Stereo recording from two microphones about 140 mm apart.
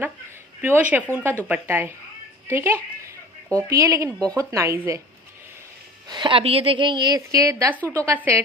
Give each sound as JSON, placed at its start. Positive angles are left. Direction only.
{"t": 0.6, "sound": "a woman's voice", "side_deg": -10}
{"t": 6.1, "sound": "a woman's voice", "side_deg": -35}